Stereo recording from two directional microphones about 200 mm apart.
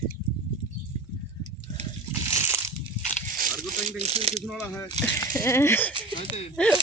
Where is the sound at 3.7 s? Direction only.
35° right (ahead or behind).